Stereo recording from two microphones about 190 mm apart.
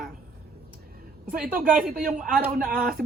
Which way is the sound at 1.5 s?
45° right (ahead or behind).